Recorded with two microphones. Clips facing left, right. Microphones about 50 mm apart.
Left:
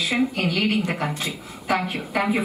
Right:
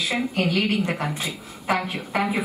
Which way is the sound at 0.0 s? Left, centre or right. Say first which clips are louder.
Left 1 dB; centre.